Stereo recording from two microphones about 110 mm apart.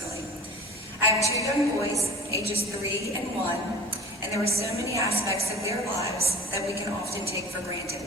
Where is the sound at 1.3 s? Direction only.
30° right (ahead or behind).